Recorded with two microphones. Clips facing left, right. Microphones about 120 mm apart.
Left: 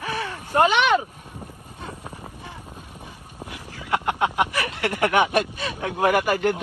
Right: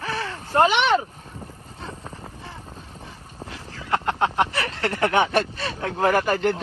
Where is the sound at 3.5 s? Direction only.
15° left (ahead or behind).